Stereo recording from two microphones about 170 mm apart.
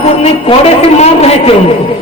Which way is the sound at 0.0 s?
40° left (ahead or behind).